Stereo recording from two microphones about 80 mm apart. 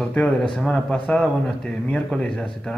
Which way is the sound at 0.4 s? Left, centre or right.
Centre.